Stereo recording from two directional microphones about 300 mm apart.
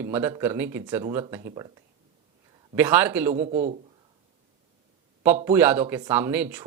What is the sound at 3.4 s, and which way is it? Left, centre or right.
Speech, right.